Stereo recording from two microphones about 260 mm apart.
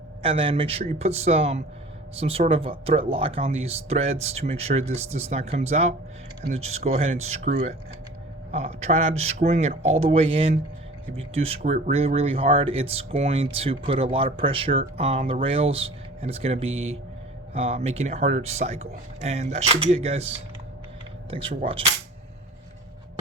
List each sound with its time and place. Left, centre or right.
0.2 s speech: right
16.7 s speech: right
17.5 s speech: right